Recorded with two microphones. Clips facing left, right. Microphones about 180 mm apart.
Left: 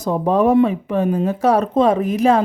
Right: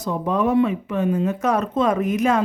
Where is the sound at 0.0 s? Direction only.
35° left (ahead or behind).